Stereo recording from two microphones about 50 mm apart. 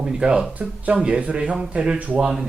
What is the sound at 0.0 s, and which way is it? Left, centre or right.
A man's voice, centre.